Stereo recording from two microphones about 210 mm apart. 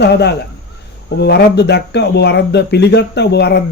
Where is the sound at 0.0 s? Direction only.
55° left (ahead or behind).